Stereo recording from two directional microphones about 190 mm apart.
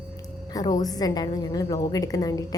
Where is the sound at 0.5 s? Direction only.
20° left (ahead or behind).